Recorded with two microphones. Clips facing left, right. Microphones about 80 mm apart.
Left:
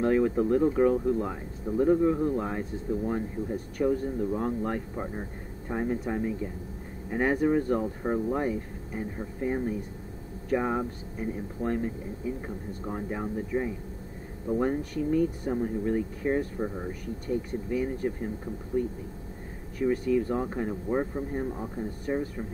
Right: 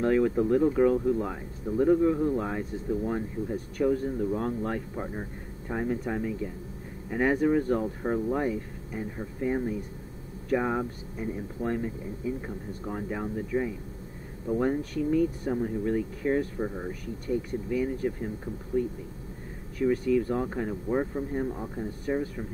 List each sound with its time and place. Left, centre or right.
0.0 s speech: centre
15.4 s speech: centre
15.8 s speech: centre
17.6 s speech: centre
19.8 s speech: centre